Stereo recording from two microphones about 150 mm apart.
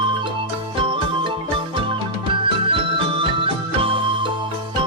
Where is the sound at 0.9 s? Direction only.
35° right (ahead or behind).